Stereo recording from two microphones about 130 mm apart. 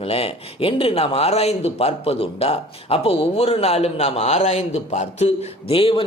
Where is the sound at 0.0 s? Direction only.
50° left (ahead or behind).